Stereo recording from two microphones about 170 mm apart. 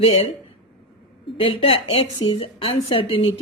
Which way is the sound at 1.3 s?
30° left (ahead or behind).